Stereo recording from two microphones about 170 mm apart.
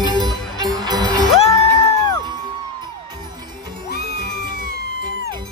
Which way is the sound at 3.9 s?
80° left.